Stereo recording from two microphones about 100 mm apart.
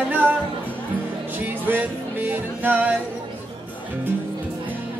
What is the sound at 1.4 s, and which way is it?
Music, 20° right (ahead or behind).